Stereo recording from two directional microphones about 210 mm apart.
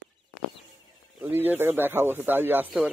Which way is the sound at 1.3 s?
10° right (ahead or behind).